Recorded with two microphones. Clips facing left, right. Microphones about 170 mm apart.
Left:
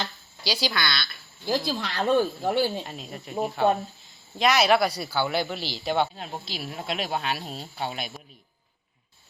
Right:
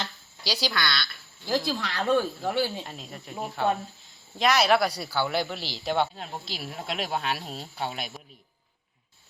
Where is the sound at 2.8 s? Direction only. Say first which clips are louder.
Left 3 dB; 10° left (ahead or behind).